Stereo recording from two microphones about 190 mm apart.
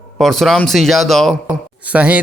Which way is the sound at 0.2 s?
Centre (ahead or behind).